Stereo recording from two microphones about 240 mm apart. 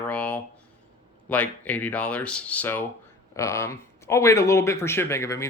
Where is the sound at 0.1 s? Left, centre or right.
Centre.